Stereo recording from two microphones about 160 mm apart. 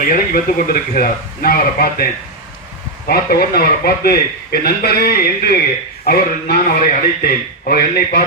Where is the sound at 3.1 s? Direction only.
75° left (ahead or behind).